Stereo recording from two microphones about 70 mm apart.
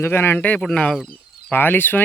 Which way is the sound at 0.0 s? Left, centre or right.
Left.